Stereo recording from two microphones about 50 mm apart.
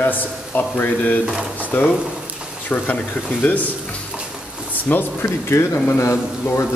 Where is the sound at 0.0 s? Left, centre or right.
Left.